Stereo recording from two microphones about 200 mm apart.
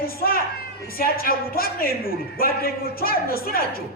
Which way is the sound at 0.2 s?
50° left (ahead or behind).